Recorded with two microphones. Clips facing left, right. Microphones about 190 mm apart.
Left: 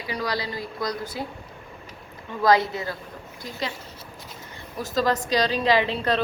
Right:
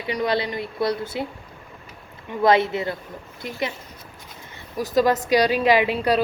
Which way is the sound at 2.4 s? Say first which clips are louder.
Right 2 dB; 25° right (ahead or behind).